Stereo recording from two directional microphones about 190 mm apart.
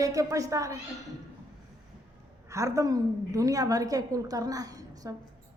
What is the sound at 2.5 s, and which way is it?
A woman's voice, 15° right (ahead or behind).